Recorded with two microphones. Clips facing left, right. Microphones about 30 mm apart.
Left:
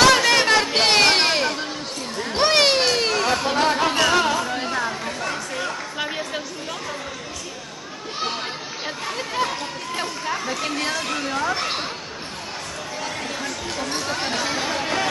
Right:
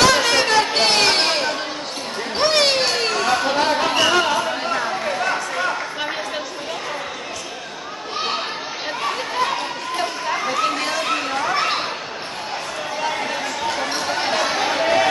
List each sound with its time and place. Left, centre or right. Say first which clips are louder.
0.0 s chatter: even; centre
0.7 s a sound: even; centre
2.3 s music: even; centre; by 5.8 s right
6.0 s a sound: right 2 dB; centre
9.0 s chatter: right 3 dB; centre
13.0 s chatter: right 5 dB; centre